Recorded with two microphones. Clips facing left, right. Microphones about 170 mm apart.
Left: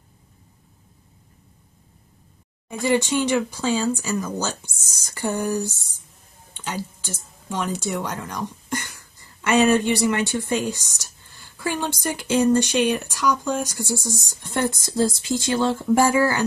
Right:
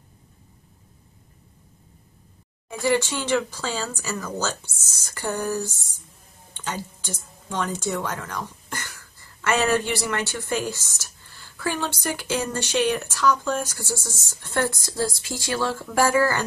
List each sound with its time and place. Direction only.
2.7 s speech: 15° left (ahead or behind)